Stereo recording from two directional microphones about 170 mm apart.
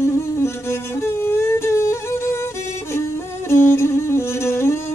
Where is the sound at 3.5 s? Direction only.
15° left (ahead or behind).